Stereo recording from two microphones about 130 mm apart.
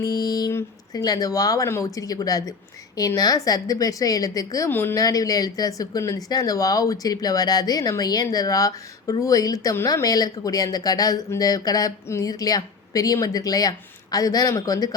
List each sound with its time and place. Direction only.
0.0 s a sound: 30° left (ahead or behind)
0.5 s speech: 30° left (ahead or behind)
5.0 s speech: 30° left (ahead or behind)